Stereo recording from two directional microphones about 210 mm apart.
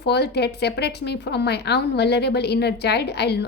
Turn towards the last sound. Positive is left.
turn(degrees=50)  # may be behind; listen again after turning